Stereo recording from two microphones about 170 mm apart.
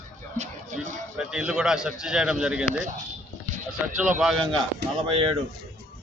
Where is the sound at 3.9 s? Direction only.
5° right (ahead or behind).